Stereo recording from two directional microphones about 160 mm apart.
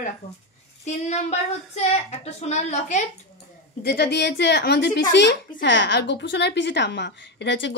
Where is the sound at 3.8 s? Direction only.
80° left.